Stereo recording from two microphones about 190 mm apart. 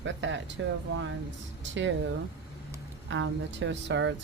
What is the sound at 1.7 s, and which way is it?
Speech, 75° right (ahead or behind).